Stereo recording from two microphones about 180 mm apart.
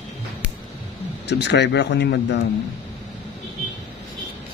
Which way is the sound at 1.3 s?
75° left (ahead or behind).